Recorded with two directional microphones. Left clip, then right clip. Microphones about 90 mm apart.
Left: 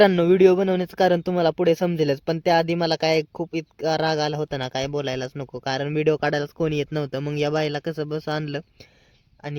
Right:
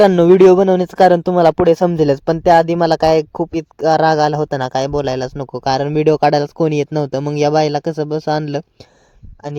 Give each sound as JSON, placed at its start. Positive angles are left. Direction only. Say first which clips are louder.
{"t": 0.2, "sound": "speech", "louder": "right 8 dB", "side_deg": -70}
{"t": 7.3, "sound": "speech", "louder": "right 10 dB", "side_deg": -60}